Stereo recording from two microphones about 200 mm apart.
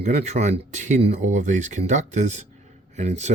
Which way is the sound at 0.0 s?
35° right (ahead or behind).